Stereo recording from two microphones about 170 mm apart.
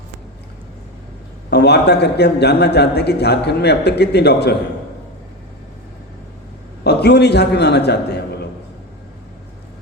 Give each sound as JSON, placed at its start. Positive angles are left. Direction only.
{"t": 1.5, "sound": "a man's voice", "side_deg": 80}
{"t": 6.8, "sound": "a man's voice", "side_deg": 75}